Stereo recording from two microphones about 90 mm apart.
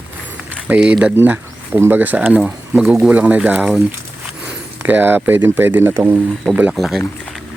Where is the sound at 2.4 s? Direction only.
5° right (ahead or behind).